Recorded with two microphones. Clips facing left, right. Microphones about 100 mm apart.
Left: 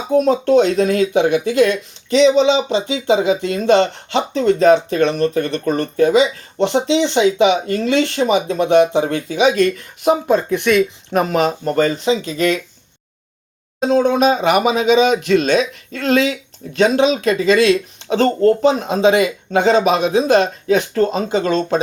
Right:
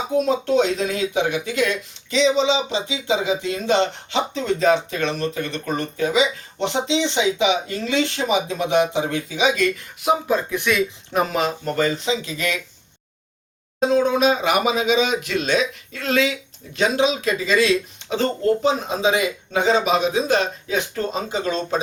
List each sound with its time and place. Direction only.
0.2 s speech: 55° left (ahead or behind)
11.6 s speech: 40° left (ahead or behind)
14.0 s speech: 60° left (ahead or behind); by 16.4 s 45° left (ahead or behind)
16.7 s speech: 65° left (ahead or behind)